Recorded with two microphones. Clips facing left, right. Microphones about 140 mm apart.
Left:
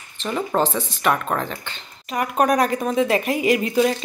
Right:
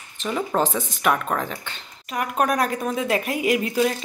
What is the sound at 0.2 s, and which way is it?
Speech, centre (ahead or behind).